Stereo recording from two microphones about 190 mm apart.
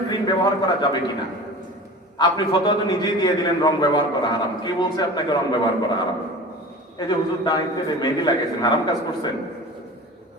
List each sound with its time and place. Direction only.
0.1 s a man's voice: 20° left (ahead or behind)
2.1 s a man's voice: 20° left (ahead or behind)
7.1 s a man's voice: 20° left (ahead or behind)